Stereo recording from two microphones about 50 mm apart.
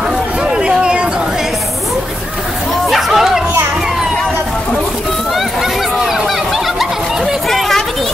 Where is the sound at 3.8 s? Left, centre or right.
Centre.